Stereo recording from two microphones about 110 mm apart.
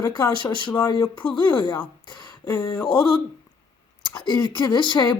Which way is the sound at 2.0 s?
40° left (ahead or behind).